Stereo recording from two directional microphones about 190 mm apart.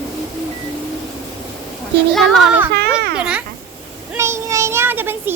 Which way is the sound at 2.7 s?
60° right (ahead or behind).